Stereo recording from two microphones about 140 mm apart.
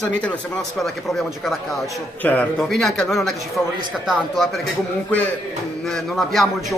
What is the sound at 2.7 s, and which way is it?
Speech, centre (ahead or behind).